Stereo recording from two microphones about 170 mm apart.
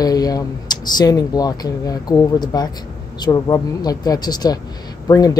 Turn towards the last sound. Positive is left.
turn(degrees=20)  # may be behind; listen again after turning